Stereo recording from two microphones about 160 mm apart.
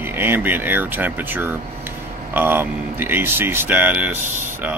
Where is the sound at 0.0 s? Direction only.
15° right (ahead or behind).